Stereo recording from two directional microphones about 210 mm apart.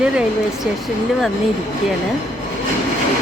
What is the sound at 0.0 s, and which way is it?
Speech, 5° right (ahead or behind).